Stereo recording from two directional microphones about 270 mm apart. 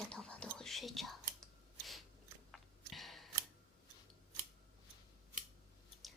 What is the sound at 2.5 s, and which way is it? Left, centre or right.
Clicking, centre.